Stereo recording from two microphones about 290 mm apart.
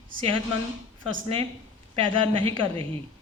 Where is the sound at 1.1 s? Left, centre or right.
Centre.